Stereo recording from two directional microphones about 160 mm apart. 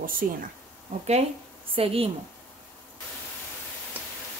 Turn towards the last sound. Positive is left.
turn(degrees=-10)  # may be behind; listen again after turning